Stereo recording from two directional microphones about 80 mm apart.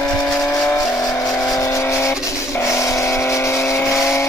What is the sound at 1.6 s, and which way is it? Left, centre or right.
Vehicle, left.